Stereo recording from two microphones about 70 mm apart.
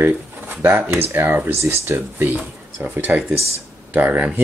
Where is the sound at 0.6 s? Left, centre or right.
Right.